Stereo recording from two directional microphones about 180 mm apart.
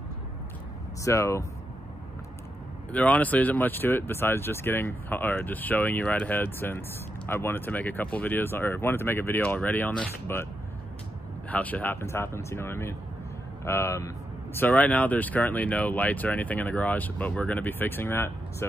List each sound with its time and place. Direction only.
1.0 s speech: 15° left (ahead or behind)
2.9 s speech: 10° left (ahead or behind)